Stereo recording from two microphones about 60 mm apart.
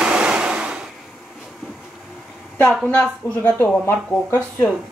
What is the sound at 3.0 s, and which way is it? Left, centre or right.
Speech, left.